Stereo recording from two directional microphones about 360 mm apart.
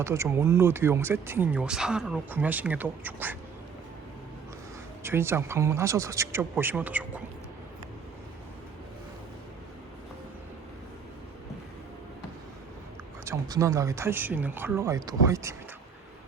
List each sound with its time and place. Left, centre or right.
0.0 s speech: centre
5.0 s speech: centre
13.2 s speech: centre